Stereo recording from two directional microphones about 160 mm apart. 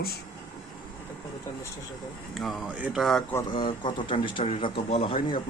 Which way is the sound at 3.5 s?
30° left (ahead or behind).